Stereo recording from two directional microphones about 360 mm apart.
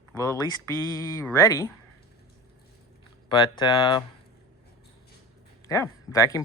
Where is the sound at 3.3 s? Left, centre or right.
Centre.